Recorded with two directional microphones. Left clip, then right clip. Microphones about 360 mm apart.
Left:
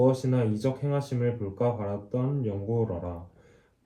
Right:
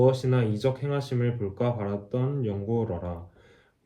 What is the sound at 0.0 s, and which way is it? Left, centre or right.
Speech, right.